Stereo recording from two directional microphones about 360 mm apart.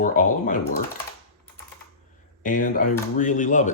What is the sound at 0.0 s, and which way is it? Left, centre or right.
Speech, left.